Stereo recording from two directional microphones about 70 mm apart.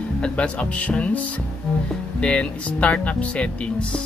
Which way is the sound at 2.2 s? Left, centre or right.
Centre.